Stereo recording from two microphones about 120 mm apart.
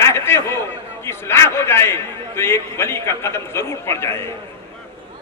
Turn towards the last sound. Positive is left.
turn(degrees=20)  # may be behind; listen again after turning